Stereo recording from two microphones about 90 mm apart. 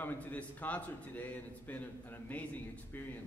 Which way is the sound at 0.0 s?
15° left (ahead or behind).